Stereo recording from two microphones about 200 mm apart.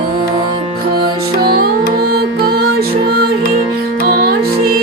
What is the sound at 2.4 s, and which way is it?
Music, 50° right (ahead or behind).